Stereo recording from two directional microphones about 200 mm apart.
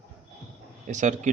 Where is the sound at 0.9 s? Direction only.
40° right (ahead or behind).